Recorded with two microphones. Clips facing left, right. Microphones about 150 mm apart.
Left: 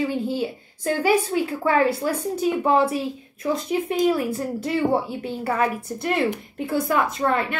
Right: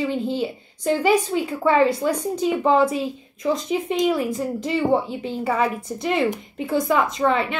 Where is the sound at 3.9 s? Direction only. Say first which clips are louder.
Even; 15° right (ahead or behind).